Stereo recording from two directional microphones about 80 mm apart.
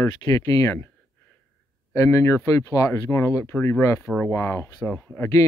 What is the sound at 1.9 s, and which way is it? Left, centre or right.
Speech, left.